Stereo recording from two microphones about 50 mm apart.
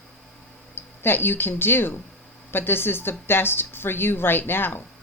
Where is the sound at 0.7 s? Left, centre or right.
Left.